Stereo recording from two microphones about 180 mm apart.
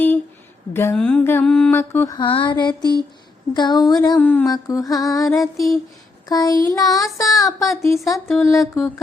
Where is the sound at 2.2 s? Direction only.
25° left (ahead or behind).